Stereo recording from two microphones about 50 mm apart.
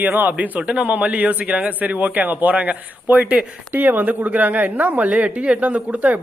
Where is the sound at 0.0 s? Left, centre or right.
Right.